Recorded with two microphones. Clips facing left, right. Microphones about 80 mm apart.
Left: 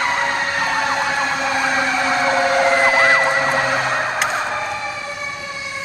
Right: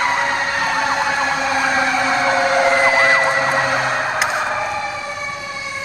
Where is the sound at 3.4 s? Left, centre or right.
Centre.